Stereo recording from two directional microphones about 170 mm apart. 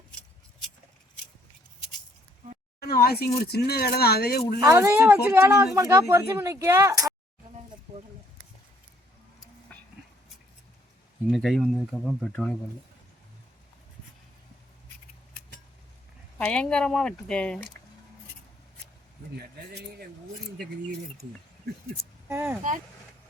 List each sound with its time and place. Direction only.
2.8 s speech: 65° left (ahead or behind)
4.6 s speech: 15° right (ahead or behind)
9.7 s a sound: 5° left (ahead or behind)
11.3 s speech: centre (ahead or behind)
16.4 s speech: 5° left (ahead or behind)
19.4 s speech: 70° right (ahead or behind)
22.3 s speech: 10° right (ahead or behind)